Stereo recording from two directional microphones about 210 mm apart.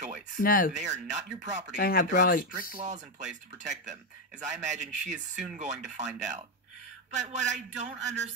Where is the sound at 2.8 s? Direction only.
35° right (ahead or behind).